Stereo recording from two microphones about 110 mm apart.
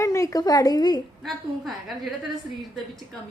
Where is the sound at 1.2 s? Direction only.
Centre (ahead or behind).